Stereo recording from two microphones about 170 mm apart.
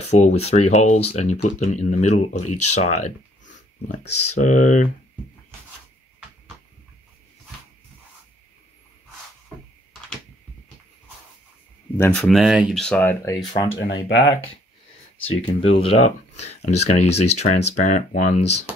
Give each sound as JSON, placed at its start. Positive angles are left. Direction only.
{"t": 0.1, "sound": "speech", "side_deg": 40}
{"t": 12.0, "sound": "speech", "side_deg": 5}
{"t": 13.5, "sound": "speech", "side_deg": 25}
{"t": 13.8, "sound": "speech", "side_deg": 90}
{"t": 15.4, "sound": "speech", "side_deg": 35}